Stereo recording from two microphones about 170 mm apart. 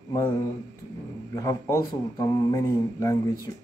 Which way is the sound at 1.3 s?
20° left (ahead or behind).